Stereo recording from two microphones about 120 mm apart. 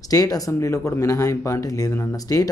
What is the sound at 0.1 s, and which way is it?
Speech, 30° left (ahead or behind).